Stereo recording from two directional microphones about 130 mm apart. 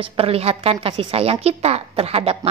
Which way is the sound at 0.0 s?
45° right (ahead or behind).